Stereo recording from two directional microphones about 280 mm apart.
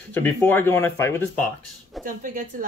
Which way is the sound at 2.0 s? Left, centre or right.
Right.